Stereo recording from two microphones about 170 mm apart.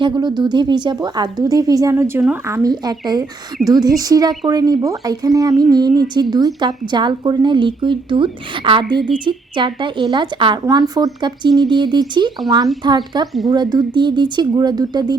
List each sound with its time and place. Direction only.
0.0 s speech: 25° right (ahead or behind)
2.6 s speech: 25° right (ahead or behind)